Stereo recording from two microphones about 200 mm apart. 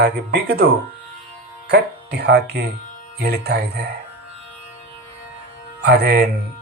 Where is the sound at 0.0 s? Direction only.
55° right (ahead or behind).